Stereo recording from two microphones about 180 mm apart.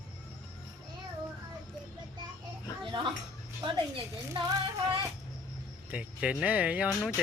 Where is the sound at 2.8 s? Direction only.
25° right (ahead or behind).